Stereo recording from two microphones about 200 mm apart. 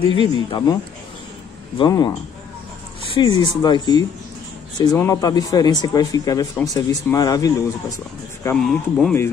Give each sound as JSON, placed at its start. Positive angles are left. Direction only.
{"t": 0.1, "sound": "speech", "side_deg": 25}
{"t": 1.8, "sound": "speech", "side_deg": 20}
{"t": 3.2, "sound": "speech", "side_deg": 20}
{"t": 8.5, "sound": "speech", "side_deg": 0}